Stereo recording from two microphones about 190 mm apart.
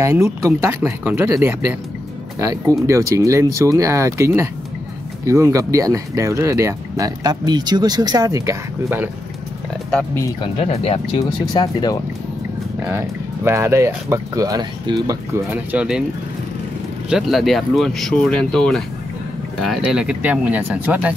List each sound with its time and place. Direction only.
0.0 s speech: 15° right (ahead or behind)
9.8 s speech: 5° left (ahead or behind)
10.4 s speech: 30° left (ahead or behind)
12.8 s speech: 10° right (ahead or behind)
17.1 s speech: centre (ahead or behind)